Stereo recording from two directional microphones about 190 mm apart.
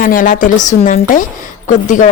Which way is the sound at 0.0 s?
45° left (ahead or behind).